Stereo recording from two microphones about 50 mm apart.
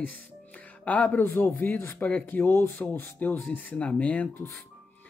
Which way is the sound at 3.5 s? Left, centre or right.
Left.